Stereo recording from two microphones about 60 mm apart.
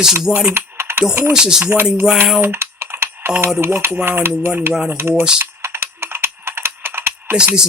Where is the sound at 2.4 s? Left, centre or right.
Right.